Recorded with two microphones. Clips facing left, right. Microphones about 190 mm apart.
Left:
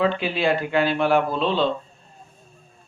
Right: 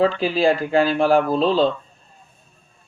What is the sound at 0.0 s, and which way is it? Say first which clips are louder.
Speech: right 4 dB; 35° right (ahead or behind).